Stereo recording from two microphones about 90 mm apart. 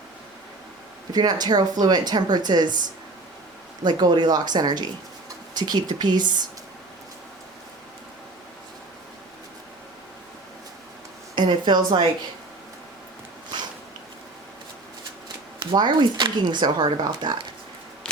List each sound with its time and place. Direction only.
1.1 s speech: 50° right (ahead or behind)
3.8 s speech: 50° right (ahead or behind)
11.3 s speech: 55° right (ahead or behind)
15.6 s speech: 55° right (ahead or behind)